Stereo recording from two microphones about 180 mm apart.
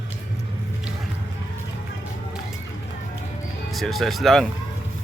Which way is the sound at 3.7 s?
Centre (ahead or behind).